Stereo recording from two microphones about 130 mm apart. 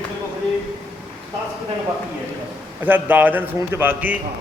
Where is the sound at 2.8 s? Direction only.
15° right (ahead or behind).